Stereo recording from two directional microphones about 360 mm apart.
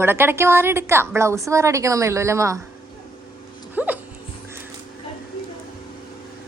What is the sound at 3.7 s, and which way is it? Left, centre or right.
Dog, centre.